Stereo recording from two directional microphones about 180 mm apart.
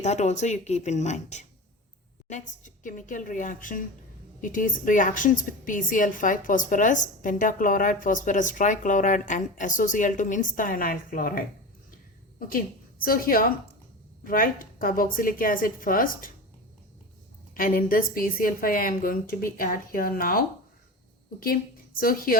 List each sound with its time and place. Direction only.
0.0 s a woman's voice: 40° left (ahead or behind)
13.1 s a woman's voice: 50° left (ahead or behind)
17.5 s a woman's voice: 50° left (ahead or behind)
21.4 s a woman's voice: 55° left (ahead or behind)